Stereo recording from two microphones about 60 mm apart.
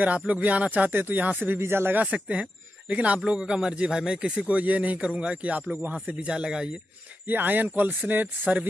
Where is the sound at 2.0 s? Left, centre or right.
Right.